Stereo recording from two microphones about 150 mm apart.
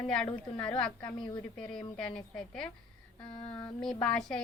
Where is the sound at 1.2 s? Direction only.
30° left (ahead or behind).